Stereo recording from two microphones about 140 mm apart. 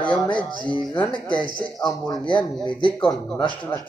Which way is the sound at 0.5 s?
35° left (ahead or behind).